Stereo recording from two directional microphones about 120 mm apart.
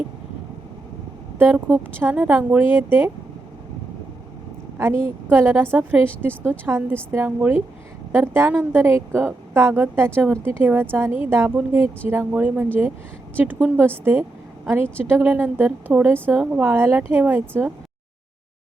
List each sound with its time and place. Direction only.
1.4 s a woman's voice: 15° right (ahead or behind)
5.3 s a woman's voice: 15° right (ahead or behind)